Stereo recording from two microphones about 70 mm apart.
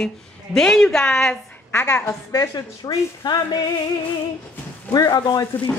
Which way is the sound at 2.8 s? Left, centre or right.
Left.